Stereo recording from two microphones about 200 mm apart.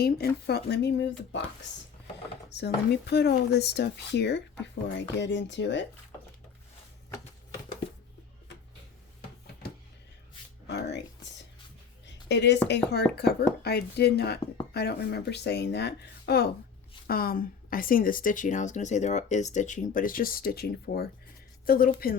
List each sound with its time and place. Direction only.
0.0 s speech: 50° left (ahead or behind)
2.5 s speech: 55° left (ahead or behind)
10.7 s a sound: 60° left (ahead or behind)
12.0 s speech: 60° left (ahead or behind)